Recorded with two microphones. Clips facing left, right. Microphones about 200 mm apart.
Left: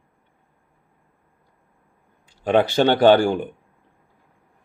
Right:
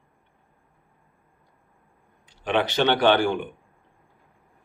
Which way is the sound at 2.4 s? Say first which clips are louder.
Left 5 dB; 45° left (ahead or behind).